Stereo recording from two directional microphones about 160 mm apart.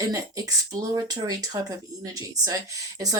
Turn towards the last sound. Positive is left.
turn(degrees=-20)  # may be behind; listen again after turning